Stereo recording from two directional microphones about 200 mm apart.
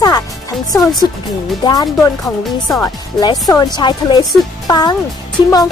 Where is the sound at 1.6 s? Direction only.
20° left (ahead or behind).